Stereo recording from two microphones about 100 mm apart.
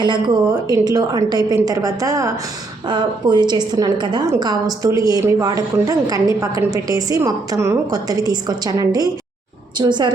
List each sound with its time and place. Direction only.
0.7 s a woman's voice: 40° right (ahead or behind)
2.8 s a woman's voice: 50° right (ahead or behind)